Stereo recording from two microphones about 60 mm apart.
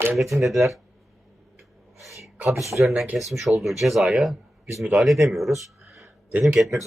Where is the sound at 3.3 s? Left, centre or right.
Centre.